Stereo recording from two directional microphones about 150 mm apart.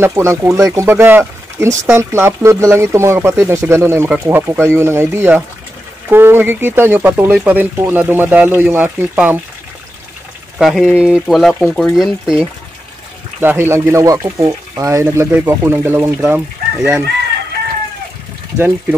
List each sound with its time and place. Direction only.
0.0 s speech: 20° right (ahead or behind)
10.6 s speech: centre (ahead or behind)
13.4 s speech: 15° right (ahead or behind)